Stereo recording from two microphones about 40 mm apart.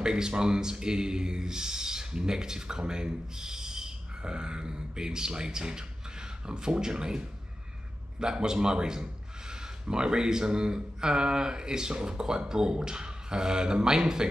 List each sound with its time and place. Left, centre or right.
0.0 s speech: right